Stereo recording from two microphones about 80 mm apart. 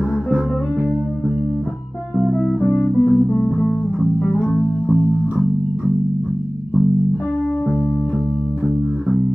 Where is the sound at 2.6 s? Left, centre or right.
Centre.